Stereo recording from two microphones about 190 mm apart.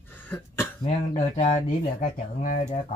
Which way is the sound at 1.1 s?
40° left (ahead or behind).